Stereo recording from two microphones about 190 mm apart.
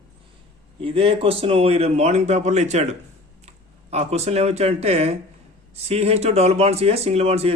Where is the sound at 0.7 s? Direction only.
30° right (ahead or behind).